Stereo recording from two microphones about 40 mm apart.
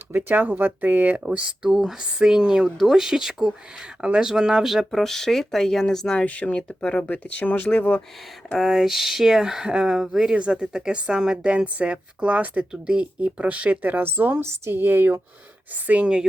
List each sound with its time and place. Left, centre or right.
0.2 s speech: right
2.0 s speech: centre
4.9 s speech: centre
6.1 s speech: left
7.1 s speech: left
8.5 s speech: centre
9.6 s speech: right
9.9 s speech: centre
10.3 s speech: right
10.7 s speech: centre
11.5 s speech: right